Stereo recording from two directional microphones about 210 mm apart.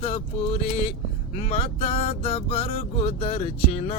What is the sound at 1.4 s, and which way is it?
Music, 30° left (ahead or behind).